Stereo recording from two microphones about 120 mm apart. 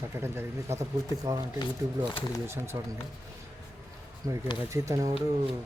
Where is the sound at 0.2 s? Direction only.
20° right (ahead or behind).